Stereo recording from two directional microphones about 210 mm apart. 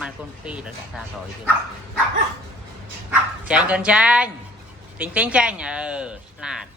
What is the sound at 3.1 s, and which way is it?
Speech, 5° right (ahead or behind).